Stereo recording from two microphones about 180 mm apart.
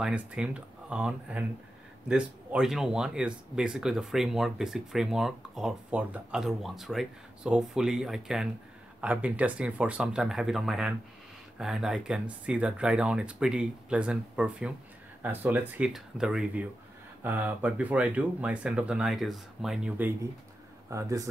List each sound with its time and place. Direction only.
0.0 s speech: 5° right (ahead or behind)